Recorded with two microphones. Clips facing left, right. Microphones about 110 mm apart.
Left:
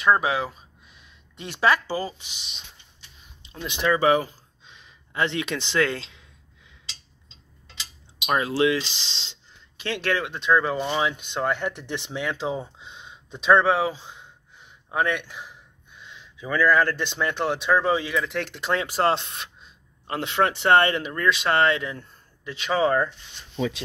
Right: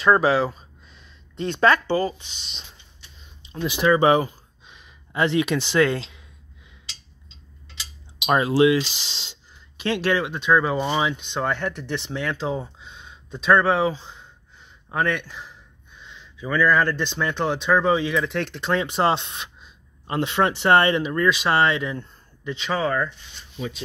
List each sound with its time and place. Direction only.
0.0 s speech: centre (ahead or behind)
3.4 s speech: 5° right (ahead or behind)
4.0 s speech: 25° right (ahead or behind)
4.6 s a sound: 15° right (ahead or behind)
8.3 s speech: 20° right (ahead or behind)
11.1 s speech: 5° left (ahead or behind)
12.7 s a sound: 20° left (ahead or behind)
16.1 s speech: 10° left (ahead or behind)
22.8 s speech: 25° left (ahead or behind)